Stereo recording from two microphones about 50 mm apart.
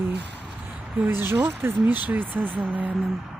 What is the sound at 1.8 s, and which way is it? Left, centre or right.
Speech, right.